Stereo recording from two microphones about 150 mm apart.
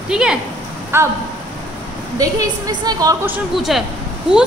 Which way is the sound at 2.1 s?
25° right (ahead or behind).